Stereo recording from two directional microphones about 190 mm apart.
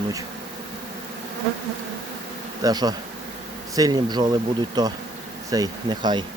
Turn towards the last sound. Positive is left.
turn(degrees=-25)  # may be behind; listen again after turning